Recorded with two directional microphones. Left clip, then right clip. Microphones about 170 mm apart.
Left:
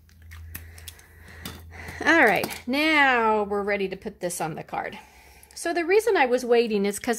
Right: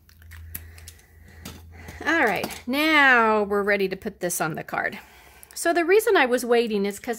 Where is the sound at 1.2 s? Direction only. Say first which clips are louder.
Left 3 dB; 20° left (ahead or behind).